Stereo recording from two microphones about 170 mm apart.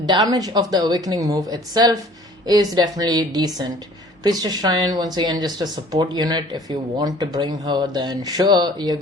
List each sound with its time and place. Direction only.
0.0 s speech: 25° right (ahead or behind)